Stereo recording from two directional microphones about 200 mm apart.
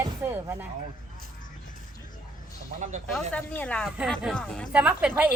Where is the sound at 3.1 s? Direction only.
10° left (ahead or behind).